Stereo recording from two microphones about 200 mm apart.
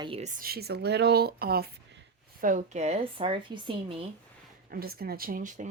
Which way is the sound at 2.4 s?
40° right (ahead or behind).